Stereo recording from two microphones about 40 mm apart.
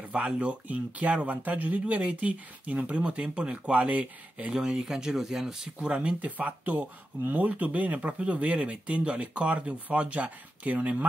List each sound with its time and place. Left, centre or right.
0.2 s speech: right
4.5 s speech: centre
6.2 s speech: right